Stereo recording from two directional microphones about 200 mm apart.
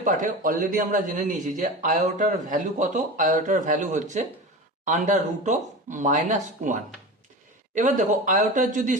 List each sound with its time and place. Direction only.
0.0 s a man's voice: 40° right (ahead or behind)
7.8 s a man's voice: 40° right (ahead or behind)